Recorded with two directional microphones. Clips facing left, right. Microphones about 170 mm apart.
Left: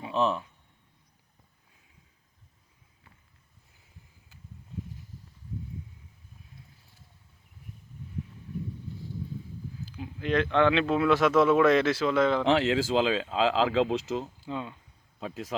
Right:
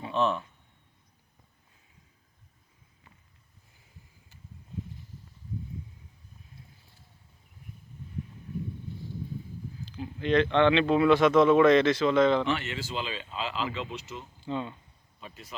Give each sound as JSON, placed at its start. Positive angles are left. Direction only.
{"t": 0.0, "sound": "speech", "side_deg": 0}
{"t": 9.8, "sound": "speech", "side_deg": 5}
{"t": 12.5, "sound": "speech", "side_deg": 90}
{"t": 14.4, "sound": "speech", "side_deg": 5}
{"t": 15.2, "sound": "speech", "side_deg": 90}